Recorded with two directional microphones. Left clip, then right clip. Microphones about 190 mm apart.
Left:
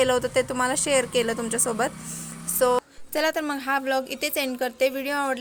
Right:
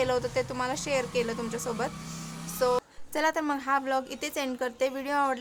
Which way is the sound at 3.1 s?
5° left (ahead or behind).